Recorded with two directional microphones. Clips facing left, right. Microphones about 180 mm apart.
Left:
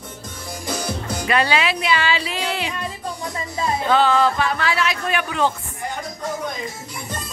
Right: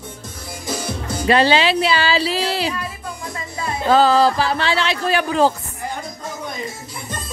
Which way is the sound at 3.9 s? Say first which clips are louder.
Right 4 dB; 35° right (ahead or behind).